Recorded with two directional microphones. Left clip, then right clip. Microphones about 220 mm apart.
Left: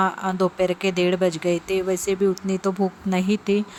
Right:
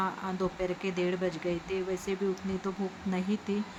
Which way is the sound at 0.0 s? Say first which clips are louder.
Left 11 dB; 40° left (ahead or behind).